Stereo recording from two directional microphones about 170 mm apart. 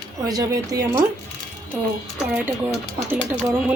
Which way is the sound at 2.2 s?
5° right (ahead or behind).